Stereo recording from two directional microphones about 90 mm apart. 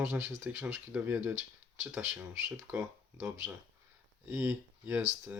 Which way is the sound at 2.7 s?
25° right (ahead or behind).